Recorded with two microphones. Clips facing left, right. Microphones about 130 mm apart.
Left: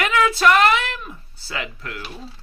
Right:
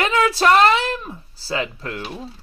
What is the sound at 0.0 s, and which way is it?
Speech, 30° right (ahead or behind).